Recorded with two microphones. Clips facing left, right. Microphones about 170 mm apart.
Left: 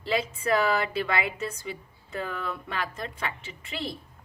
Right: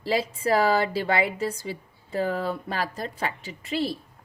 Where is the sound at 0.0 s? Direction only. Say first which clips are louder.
Right 3 dB; 35° right (ahead or behind).